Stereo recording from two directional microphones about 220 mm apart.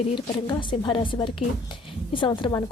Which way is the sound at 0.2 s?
20° left (ahead or behind).